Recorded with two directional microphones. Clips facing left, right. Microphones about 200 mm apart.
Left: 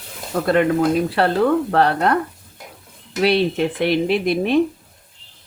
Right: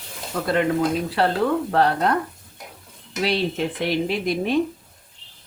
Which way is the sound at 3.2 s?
65° left (ahead or behind).